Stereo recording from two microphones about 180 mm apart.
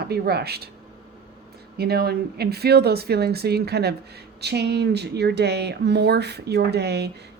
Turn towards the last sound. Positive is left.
turn(degrees=-65)  # may be behind; listen again after turning